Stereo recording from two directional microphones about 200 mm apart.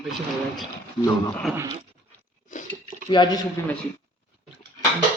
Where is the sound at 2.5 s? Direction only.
40° left (ahead or behind).